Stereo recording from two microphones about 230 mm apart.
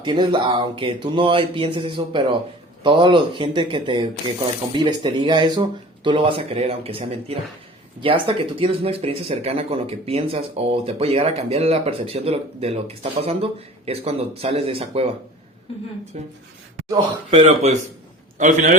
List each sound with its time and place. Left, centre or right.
0.0 s speech: right
16.1 s a man's voice: right